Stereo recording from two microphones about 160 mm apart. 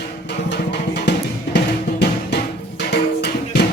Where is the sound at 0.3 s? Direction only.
90° left.